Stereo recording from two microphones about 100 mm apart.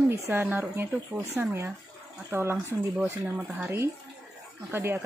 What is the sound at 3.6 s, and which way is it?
A woman's voice, 25° right (ahead or behind).